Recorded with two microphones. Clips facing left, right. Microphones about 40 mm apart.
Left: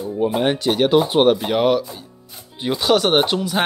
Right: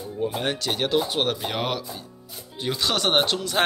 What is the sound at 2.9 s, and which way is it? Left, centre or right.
Speech, centre.